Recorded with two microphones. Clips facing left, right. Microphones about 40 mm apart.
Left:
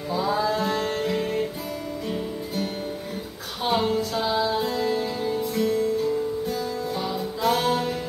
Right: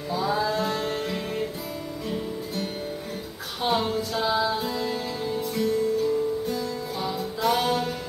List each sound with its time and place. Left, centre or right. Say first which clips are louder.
0.1 s music: left 1 dB; centre
3.6 s music: left 2 dB; centre